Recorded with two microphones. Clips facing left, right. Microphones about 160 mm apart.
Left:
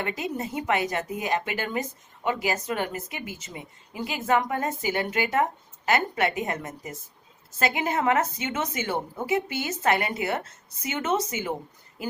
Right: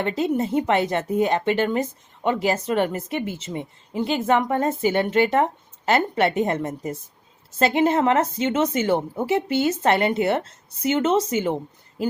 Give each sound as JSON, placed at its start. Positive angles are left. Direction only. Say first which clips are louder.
{"t": 0.0, "sound": "a woman's voice", "louder": "right 8 dB", "side_deg": -30}